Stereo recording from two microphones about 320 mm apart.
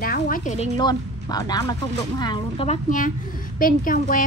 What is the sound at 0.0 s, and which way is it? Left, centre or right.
Speech, left.